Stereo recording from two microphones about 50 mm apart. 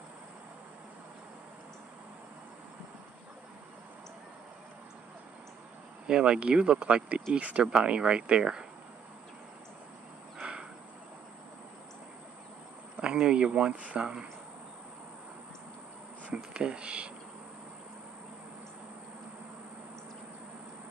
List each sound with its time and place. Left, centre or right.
6.0 s speech: centre
10.4 s a sound: centre
12.9 s speech: centre
16.5 s speech: centre